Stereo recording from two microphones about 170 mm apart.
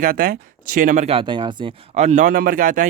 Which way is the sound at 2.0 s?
45° right (ahead or behind).